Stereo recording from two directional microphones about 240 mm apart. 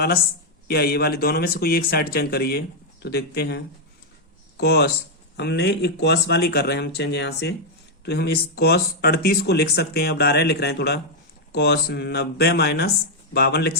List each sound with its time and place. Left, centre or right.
0.7 s speech: left